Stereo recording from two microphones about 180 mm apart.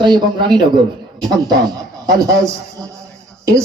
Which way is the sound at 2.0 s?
20° right (ahead or behind).